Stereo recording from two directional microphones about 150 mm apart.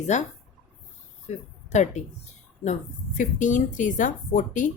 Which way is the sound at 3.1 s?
60° left (ahead or behind).